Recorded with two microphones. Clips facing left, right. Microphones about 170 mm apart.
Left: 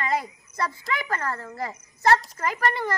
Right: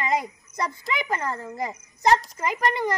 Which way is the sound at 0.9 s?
15° right (ahead or behind).